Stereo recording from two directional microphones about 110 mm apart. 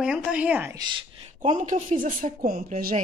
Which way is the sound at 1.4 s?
90° right.